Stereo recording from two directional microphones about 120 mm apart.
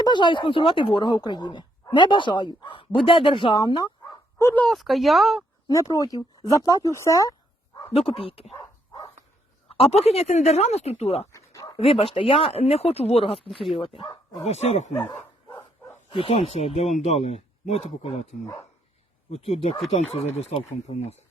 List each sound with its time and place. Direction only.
0.0 s speech: 40° left (ahead or behind)
4.4 s speech: 25° left (ahead or behind)
4.6 s speech: centre (ahead or behind)
5.6 s speech: 25° left (ahead or behind)
7.9 s speech: 55° left (ahead or behind)
9.6 s a man's voice: 55° left (ahead or behind)
11.3 s bow-wow: 25° left (ahead or behind)
11.8 s speech: 50° left (ahead or behind)
14.4 s a man's voice: 65° left (ahead or behind)
16.2 s a man's voice: 55° left (ahead or behind)
19.3 s a man's voice: 60° left (ahead or behind)